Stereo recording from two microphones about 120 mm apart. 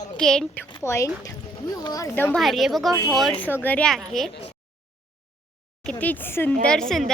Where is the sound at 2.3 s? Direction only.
Centre (ahead or behind).